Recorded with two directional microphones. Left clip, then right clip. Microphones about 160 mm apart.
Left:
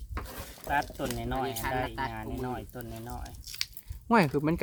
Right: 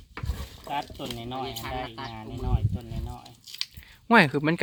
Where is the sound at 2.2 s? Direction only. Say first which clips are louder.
Left 2 dB; 5° left (ahead or behind).